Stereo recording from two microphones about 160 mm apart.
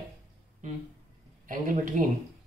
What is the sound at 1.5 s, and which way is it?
Speech, 55° right (ahead or behind).